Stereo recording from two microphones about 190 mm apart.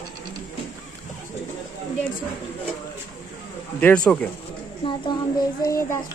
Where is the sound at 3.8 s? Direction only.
5° left (ahead or behind).